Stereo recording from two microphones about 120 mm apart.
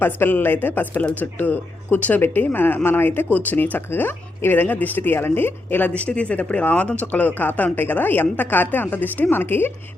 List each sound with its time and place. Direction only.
0.0 s a woman's voice: 15° left (ahead or behind)